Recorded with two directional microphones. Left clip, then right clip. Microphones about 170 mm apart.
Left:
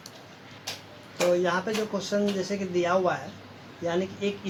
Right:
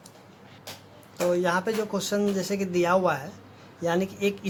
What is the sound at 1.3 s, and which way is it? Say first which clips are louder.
Speech: right 2 dB; 45° right (ahead or behind).